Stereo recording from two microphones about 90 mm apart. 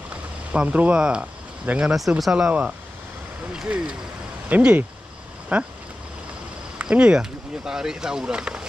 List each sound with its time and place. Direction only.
0.5 s speech: 15° right (ahead or behind)
3.5 s speech: 10° right (ahead or behind)
6.8 s speech: 10° right (ahead or behind)